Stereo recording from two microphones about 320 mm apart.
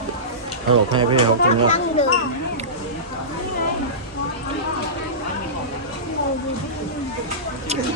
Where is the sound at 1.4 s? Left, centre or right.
Left.